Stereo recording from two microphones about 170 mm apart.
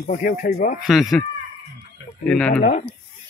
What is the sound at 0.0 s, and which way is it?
Speech, 50° left (ahead or behind).